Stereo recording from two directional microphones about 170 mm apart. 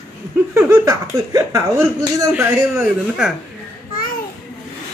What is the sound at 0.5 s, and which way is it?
Speech, 15° right (ahead or behind).